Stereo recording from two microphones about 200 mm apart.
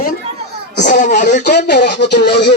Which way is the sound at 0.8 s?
40° left (ahead or behind).